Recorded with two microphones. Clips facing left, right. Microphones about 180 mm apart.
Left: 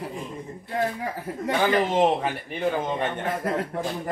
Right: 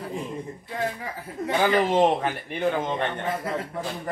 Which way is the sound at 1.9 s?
Centre (ahead or behind).